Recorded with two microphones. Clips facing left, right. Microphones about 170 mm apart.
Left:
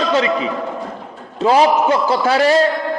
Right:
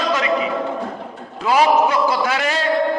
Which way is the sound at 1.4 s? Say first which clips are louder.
Left 2 dB; 30° left (ahead or behind).